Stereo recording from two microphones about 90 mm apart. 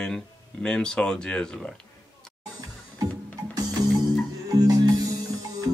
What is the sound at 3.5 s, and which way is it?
Music, 50° right (ahead or behind).